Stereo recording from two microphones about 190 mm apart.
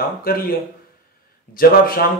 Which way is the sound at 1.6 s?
50° left (ahead or behind).